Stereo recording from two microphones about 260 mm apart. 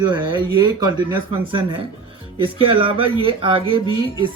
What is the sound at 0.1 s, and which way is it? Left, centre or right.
A man's voice, centre.